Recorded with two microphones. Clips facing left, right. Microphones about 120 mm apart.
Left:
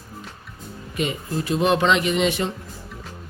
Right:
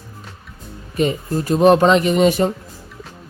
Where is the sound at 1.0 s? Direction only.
40° right (ahead or behind).